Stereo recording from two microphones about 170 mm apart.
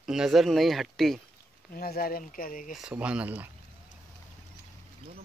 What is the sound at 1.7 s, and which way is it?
Speech, 60° left (ahead or behind).